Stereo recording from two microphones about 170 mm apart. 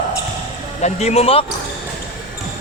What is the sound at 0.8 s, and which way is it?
Speech, 40° left (ahead or behind).